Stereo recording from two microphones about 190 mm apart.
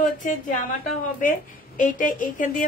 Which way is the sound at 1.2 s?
45° left (ahead or behind).